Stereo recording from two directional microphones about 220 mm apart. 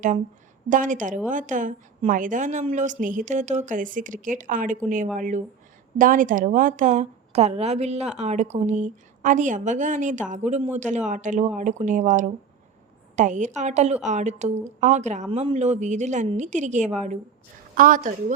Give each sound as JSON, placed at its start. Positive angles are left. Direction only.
{"t": 0.7, "sound": "a woman's voice", "side_deg": -35}